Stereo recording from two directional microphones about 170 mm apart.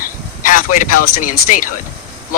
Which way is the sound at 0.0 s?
50° left (ahead or behind).